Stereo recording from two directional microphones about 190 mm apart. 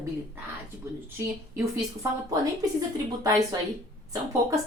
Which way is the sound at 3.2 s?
15° right (ahead or behind).